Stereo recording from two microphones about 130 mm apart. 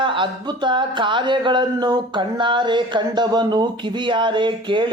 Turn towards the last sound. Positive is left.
turn(degrees=-40)  # may be behind; listen again after turning